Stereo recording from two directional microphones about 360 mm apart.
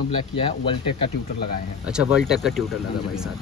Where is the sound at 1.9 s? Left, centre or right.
Centre.